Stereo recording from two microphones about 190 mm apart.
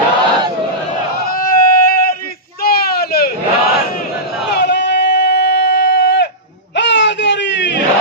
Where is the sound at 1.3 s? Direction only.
50° left (ahead or behind).